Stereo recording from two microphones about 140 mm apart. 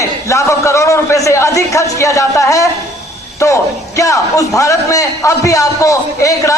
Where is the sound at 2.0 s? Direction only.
20° left (ahead or behind).